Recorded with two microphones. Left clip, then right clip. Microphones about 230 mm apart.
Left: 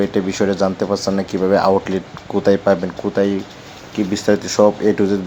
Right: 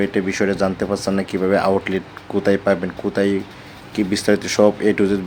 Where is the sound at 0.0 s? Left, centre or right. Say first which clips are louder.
Left 2 dB; centre.